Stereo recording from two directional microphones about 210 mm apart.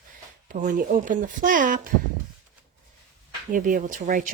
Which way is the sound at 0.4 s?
40° right (ahead or behind).